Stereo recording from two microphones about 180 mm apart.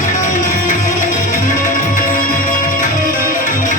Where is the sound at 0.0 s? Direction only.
45° left (ahead or behind).